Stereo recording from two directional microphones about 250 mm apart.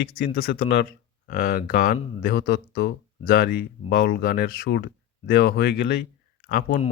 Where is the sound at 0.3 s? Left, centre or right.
Left.